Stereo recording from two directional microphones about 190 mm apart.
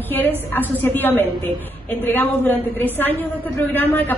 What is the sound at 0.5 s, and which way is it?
Speech, 10° left (ahead or behind).